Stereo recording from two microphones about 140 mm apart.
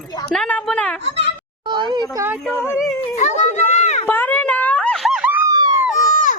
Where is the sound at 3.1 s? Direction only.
55° left (ahead or behind).